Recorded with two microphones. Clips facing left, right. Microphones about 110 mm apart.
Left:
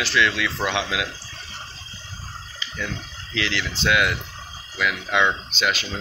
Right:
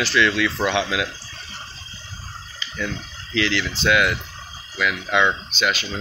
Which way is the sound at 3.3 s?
15° left (ahead or behind).